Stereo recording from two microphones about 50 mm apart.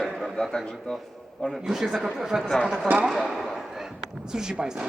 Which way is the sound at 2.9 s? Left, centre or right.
Right.